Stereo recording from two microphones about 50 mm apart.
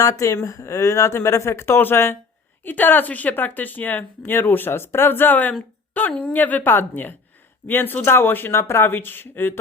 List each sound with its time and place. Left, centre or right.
0.0 s speech: left
1.8 s speech: left